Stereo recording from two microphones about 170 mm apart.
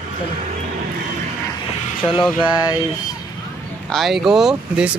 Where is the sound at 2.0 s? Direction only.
30° left (ahead or behind).